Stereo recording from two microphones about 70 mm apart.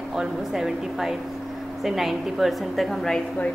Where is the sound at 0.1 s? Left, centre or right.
Centre.